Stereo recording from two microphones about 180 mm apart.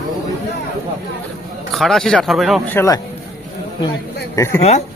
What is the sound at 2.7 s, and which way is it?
Speech, 15° left (ahead or behind).